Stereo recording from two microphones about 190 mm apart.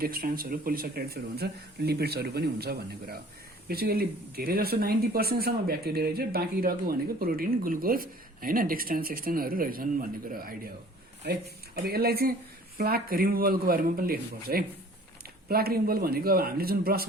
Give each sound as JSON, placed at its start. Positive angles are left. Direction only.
{"t": 0.0, "sound": "speech", "side_deg": -50}